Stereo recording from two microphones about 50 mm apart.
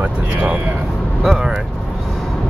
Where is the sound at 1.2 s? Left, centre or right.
Centre.